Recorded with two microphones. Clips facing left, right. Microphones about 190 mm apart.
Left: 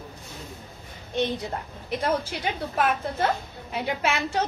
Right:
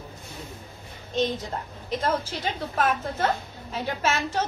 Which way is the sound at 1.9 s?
10° left (ahead or behind).